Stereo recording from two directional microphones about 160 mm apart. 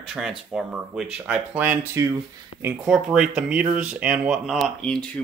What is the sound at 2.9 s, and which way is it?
Speech, 5° right (ahead or behind).